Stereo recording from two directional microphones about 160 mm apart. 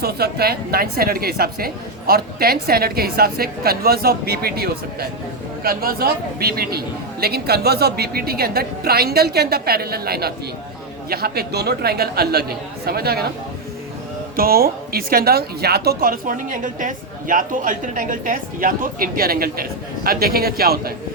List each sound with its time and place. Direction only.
0.0 s a woman's voice: 75° right (ahead or behind)
14.3 s a woman's voice: 65° right (ahead or behind)